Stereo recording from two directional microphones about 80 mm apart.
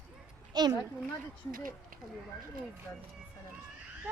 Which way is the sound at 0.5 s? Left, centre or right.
Right.